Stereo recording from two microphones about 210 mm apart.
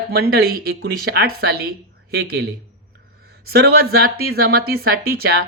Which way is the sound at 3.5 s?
50° right (ahead or behind).